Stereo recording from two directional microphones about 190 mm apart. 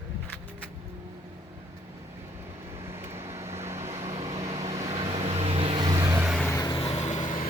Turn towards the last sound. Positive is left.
turn(degrees=40)  # may be behind; listen again after turning